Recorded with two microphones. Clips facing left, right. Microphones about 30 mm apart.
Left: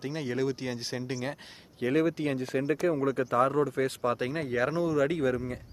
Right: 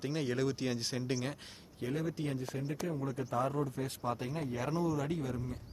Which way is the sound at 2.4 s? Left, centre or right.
Left.